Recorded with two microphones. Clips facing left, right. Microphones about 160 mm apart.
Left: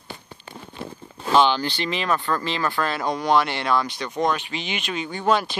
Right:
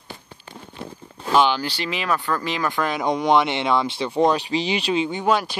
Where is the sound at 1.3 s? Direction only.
10° right (ahead or behind).